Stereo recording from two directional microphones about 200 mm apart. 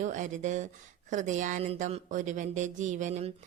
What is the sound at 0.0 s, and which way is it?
A woman's voice, 40° right (ahead or behind).